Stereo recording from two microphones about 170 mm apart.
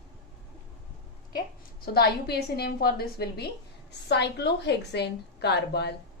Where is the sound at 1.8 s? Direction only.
70° left (ahead or behind).